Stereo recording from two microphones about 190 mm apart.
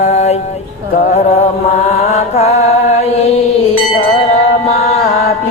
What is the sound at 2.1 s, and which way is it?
Mantra, 35° left (ahead or behind).